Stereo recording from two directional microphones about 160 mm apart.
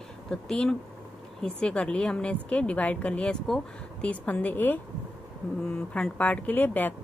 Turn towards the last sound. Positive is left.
turn(degrees=10)  # may be behind; listen again after turning